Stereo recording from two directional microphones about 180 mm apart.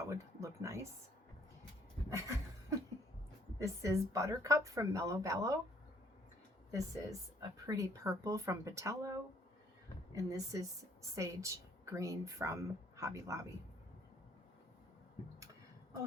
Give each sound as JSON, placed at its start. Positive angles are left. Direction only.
{"t": 0.1, "sound": "speech", "side_deg": -15}
{"t": 2.0, "sound": "a sound", "side_deg": -15}
{"t": 3.6, "sound": "speech", "side_deg": -15}
{"t": 6.7, "sound": "speech", "side_deg": -20}
{"t": 10.2, "sound": "speech", "side_deg": -20}